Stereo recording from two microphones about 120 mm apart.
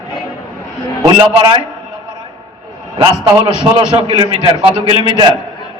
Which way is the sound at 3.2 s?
45° right (ahead or behind).